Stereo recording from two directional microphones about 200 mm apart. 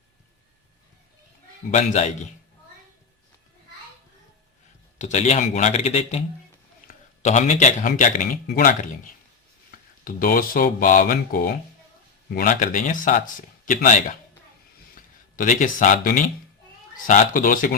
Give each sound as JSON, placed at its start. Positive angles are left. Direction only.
{"t": 1.7, "sound": "speech", "side_deg": 35}
{"t": 4.9, "sound": "speech", "side_deg": 35}
{"t": 9.7, "sound": "speech", "side_deg": 45}